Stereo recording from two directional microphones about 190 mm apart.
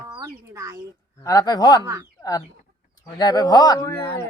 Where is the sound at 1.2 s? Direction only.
20° left (ahead or behind).